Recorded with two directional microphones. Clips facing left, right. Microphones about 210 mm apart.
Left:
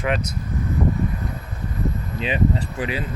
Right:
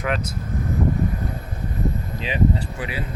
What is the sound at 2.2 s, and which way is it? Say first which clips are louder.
Speech: even; 20° left (ahead or behind).